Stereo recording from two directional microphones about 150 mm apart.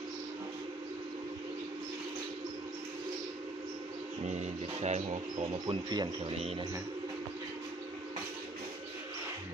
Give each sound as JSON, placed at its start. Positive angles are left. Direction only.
{"t": 4.3, "sound": "speech", "side_deg": -50}
{"t": 5.6, "sound": "speech", "side_deg": -30}